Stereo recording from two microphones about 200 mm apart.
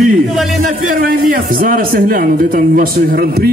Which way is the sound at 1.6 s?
45° right (ahead or behind).